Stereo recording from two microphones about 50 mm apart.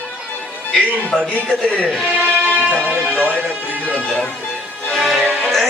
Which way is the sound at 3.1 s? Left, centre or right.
Right.